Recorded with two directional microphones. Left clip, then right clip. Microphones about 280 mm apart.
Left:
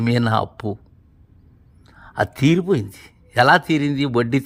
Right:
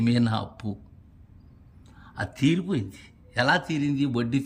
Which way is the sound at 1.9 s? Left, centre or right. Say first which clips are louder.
Left 12 dB; centre.